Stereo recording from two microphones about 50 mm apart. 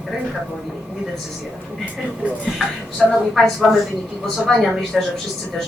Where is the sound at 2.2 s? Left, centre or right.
Right.